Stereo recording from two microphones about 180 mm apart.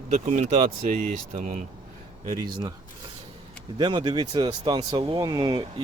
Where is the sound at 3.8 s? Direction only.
25° right (ahead or behind).